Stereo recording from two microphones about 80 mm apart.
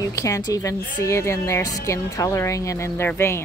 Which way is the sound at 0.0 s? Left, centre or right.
Left.